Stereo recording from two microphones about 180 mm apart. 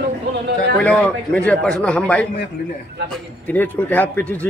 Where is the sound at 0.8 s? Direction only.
5° left (ahead or behind).